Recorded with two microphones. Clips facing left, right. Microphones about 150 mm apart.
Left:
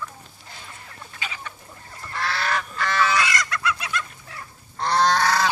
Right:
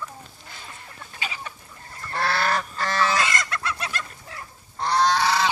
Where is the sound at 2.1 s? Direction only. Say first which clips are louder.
Right 2 dB; 45° right (ahead or behind).